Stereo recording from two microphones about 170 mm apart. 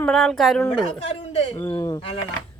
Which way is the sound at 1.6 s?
20° left (ahead or behind).